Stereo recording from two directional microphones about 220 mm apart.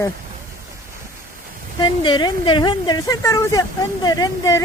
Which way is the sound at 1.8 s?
20° left (ahead or behind).